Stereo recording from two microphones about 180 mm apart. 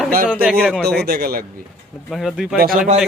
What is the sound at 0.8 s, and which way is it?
Speech, 65° right (ahead or behind).